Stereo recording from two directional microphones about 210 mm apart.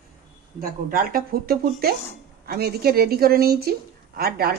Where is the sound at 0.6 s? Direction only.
45° right (ahead or behind).